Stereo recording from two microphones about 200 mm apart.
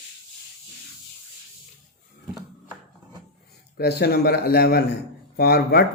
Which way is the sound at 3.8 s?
50° left (ahead or behind).